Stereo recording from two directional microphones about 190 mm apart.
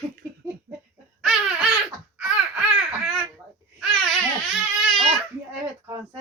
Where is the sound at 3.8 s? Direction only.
Centre (ahead or behind).